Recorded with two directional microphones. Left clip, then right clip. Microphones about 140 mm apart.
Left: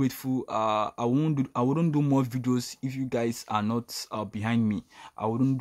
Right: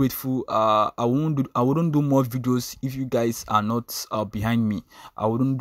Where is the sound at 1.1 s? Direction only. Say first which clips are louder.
Right 2 dB; 15° right (ahead or behind).